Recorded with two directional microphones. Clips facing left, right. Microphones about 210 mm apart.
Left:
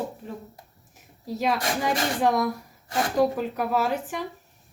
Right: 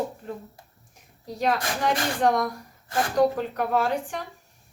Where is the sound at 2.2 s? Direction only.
5° left (ahead or behind).